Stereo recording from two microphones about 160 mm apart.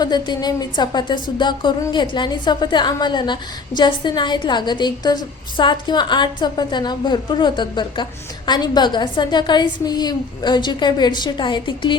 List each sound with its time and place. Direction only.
0.0 s a woman's voice: 25° left (ahead or behind)